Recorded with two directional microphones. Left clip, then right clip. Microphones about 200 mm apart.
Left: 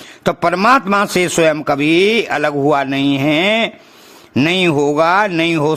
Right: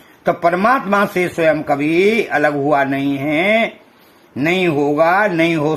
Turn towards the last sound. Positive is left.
turn(degrees=30)  # may be behind; listen again after turning